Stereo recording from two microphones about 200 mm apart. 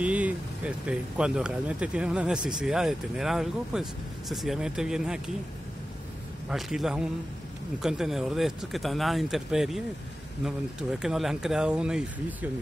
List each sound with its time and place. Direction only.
0.0 s speech: 5° right (ahead or behind)
6.5 s speech: centre (ahead or behind)